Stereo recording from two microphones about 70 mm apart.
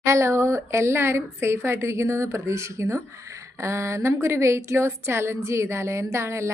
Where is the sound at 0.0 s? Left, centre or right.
Right.